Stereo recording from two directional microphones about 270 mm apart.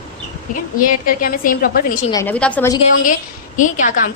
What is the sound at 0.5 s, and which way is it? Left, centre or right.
A woman's voice, left.